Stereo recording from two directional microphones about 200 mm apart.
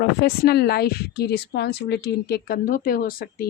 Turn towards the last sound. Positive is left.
turn(degrees=45)  # may be behind; listen again after turning